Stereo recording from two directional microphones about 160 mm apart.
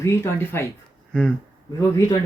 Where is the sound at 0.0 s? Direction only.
15° left (ahead or behind).